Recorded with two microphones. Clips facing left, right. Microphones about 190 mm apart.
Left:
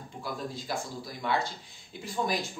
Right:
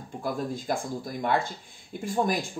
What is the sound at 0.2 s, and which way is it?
Speech, 50° right (ahead or behind).